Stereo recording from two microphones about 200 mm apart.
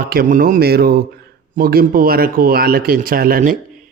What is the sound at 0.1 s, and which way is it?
Speech, 45° right (ahead or behind).